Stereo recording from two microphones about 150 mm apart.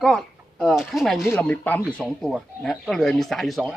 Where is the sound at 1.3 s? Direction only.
10° left (ahead or behind).